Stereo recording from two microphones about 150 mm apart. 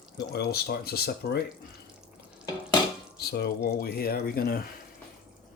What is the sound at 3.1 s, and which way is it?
Speech, 90° left.